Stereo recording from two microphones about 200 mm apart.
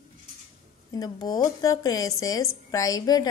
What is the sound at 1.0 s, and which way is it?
A woman's voice, 20° left (ahead or behind).